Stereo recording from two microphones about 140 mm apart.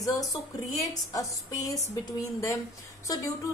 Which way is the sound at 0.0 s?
25° left (ahead or behind).